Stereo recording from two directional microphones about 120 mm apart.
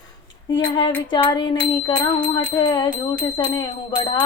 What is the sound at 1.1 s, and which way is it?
Speech, 40° left (ahead or behind).